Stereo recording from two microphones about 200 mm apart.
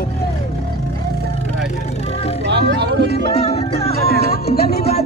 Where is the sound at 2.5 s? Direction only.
55° right (ahead or behind).